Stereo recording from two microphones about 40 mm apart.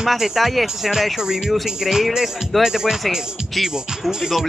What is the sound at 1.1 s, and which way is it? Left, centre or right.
Speech, centre.